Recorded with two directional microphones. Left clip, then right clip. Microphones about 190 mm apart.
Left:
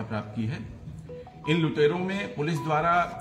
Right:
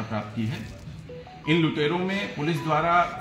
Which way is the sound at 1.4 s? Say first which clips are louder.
Even; 25° left (ahead or behind).